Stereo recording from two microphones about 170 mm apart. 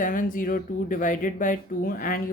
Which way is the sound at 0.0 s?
50° left (ahead or behind).